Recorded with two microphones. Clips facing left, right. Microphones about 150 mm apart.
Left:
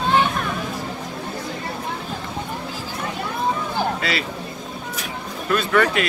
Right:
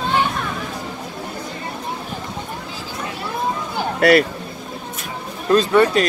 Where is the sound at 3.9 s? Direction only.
55° right (ahead or behind).